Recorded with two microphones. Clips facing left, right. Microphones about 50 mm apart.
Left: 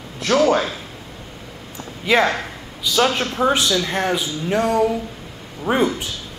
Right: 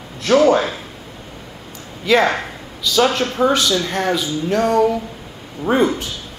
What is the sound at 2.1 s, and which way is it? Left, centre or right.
Speech, centre.